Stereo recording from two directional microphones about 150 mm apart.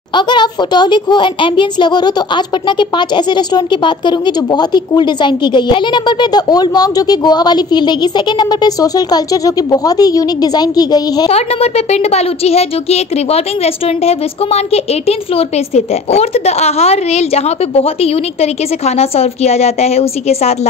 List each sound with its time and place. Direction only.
0.1 s a child's voice: 30° left (ahead or behind)
11.2 s a woman's voice: 45° left (ahead or behind)